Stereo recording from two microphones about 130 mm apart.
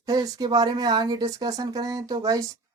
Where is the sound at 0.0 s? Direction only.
30° right (ahead or behind).